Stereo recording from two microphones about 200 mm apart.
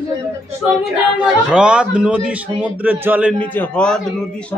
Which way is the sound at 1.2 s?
5° right (ahead or behind).